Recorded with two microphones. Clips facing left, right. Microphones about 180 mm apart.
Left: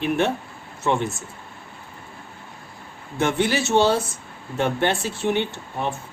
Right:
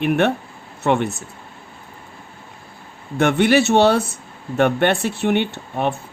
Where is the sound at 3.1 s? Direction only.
65° right (ahead or behind).